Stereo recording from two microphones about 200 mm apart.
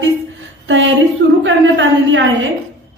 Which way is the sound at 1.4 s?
65° right (ahead or behind).